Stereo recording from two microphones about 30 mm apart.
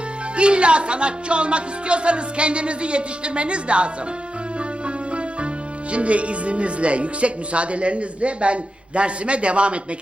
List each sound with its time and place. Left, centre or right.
0.3 s speech: right
5.9 s speech: right